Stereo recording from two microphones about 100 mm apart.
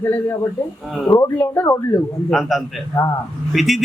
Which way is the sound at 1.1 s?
20° left (ahead or behind).